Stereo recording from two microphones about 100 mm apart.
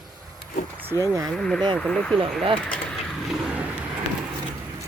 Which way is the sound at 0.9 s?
35° left (ahead or behind).